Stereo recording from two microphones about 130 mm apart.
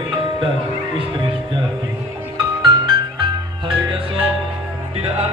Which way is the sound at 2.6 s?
35° right (ahead or behind).